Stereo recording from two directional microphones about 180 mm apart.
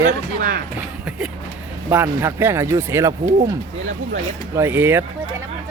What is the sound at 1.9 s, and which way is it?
Speech, 10° right (ahead or behind).